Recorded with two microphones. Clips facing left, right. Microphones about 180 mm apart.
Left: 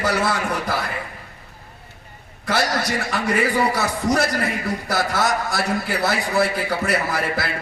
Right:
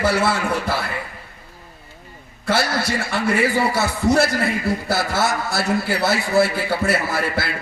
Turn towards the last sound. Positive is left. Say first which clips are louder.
# right 1 dB
turn(degrees=-30)  # may be behind; listen again after turning